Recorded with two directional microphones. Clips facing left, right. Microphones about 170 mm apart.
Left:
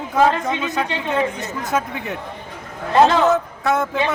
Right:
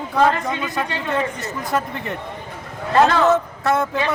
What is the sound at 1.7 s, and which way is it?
Speech, centre (ahead or behind).